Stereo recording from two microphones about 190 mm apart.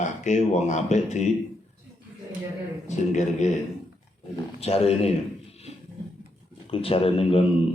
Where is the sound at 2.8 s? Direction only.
40° left (ahead or behind).